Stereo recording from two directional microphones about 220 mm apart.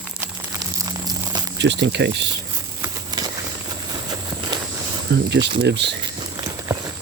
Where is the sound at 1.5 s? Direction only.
55° right (ahead or behind).